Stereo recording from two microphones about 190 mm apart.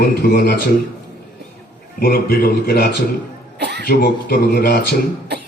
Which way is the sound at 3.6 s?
60° right (ahead or behind).